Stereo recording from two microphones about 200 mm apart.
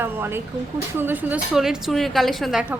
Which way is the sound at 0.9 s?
10° right (ahead or behind).